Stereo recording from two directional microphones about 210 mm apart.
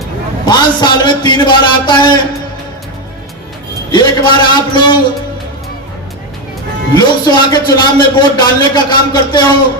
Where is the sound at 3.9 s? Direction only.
20° left (ahead or behind).